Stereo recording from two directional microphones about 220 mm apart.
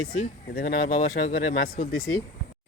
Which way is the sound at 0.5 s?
40° left (ahead or behind).